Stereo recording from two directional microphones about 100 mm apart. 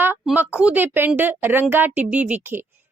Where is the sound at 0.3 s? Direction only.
15° right (ahead or behind).